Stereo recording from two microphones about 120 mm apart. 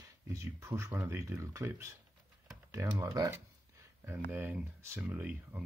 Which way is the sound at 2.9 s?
30° right (ahead or behind).